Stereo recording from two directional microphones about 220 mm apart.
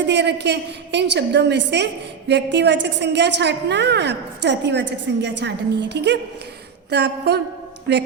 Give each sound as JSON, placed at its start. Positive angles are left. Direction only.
{"t": 0.0, "sound": "a woman's voice", "side_deg": -50}